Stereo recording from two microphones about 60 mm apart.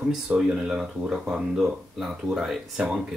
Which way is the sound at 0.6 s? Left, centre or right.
Centre.